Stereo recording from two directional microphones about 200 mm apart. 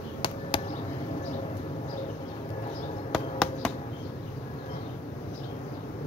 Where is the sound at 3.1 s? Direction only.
Centre (ahead or behind).